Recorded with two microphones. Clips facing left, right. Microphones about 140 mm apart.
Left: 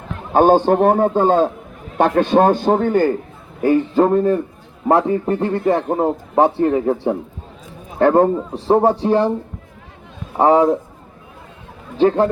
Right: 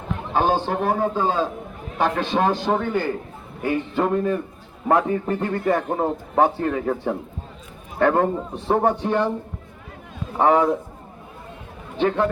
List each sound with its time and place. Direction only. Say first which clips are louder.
0.3 s a man's voice: left 9 dB; 50° left (ahead or behind); by 9.3 s 35° left (ahead or behind)
10.3 s a man's voice: left 4 dB; 30° left (ahead or behind)
11.9 s a man's voice: left 6 dB; 35° left (ahead or behind)